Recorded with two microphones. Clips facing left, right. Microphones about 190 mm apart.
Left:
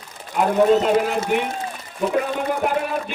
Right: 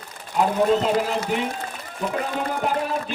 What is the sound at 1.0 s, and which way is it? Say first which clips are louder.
Speech: left 3 dB; 55° left (ahead or behind).